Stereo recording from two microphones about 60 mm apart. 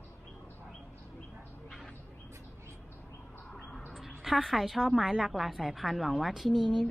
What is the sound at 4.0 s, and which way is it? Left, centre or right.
A woman's voice, centre.